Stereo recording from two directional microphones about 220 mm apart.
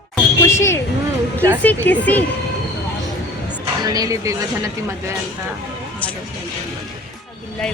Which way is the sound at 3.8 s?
15° right (ahead or behind).